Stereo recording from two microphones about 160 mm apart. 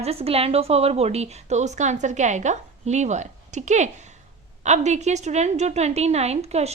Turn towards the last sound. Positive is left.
turn(degrees=-40)  # may be behind; listen again after turning